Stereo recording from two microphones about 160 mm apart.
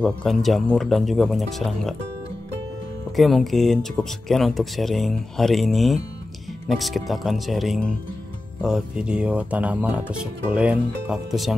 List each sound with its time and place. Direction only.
0.0 s speech: centre (ahead or behind)
3.2 s speech: centre (ahead or behind)